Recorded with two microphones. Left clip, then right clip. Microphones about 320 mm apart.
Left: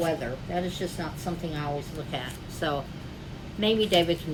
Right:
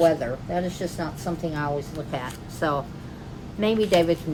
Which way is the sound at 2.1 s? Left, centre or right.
Centre.